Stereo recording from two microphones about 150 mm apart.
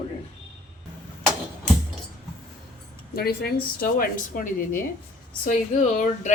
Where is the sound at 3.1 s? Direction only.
90° left.